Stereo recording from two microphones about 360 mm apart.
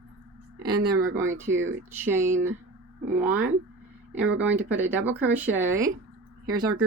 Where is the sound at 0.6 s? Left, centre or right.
Right.